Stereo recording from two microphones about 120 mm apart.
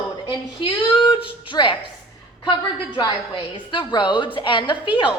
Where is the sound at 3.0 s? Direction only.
40° left (ahead or behind).